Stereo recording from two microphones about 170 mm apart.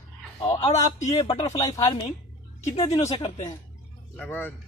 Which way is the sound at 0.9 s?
40° left (ahead or behind).